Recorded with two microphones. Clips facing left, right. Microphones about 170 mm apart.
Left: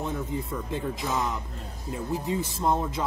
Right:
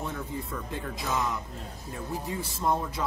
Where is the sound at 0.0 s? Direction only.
20° left (ahead or behind).